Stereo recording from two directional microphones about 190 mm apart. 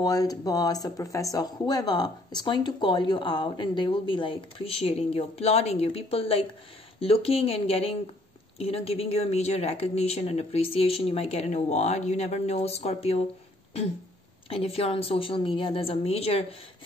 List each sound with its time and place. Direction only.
0.0 s speech: 20° left (ahead or behind)
14.5 s speech: 30° left (ahead or behind)